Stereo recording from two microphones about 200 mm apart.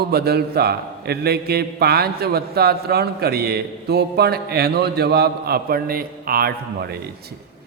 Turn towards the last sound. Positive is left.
turn(degrees=-50)  # may be behind; listen again after turning